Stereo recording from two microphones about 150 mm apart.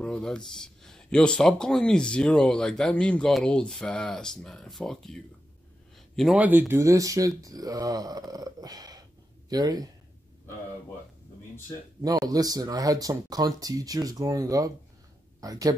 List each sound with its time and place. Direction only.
0.0 s speech: 5° left (ahead or behind)
5.9 s a sound: centre (ahead or behind)
6.3 s speech: 10° right (ahead or behind)
6.7 s speech: 20° right (ahead or behind)
12.0 s speech: 25° right (ahead or behind)